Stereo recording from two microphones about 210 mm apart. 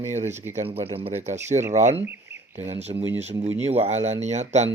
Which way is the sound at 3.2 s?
30° right (ahead or behind).